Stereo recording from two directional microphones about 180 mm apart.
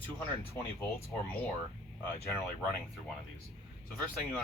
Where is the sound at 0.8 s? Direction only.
15° left (ahead or behind).